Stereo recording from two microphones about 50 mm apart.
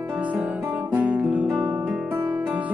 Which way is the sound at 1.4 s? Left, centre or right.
Right.